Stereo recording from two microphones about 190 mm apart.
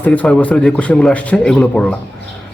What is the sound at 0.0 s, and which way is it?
A man's voice, 10° left (ahead or behind).